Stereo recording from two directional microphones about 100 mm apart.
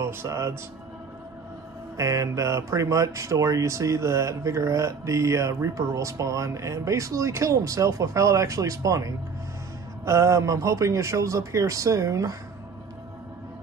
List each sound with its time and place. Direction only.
0.0 s speech: 25° right (ahead or behind)
2.0 s speech: 30° right (ahead or behind)